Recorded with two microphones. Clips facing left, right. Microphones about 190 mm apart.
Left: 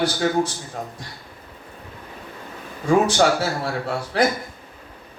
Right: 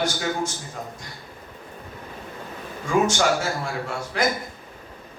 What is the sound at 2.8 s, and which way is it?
Speech, 35° left (ahead or behind).